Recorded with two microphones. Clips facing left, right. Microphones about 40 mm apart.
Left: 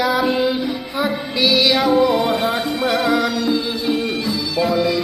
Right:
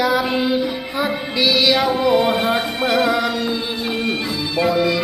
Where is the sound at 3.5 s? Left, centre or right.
Right.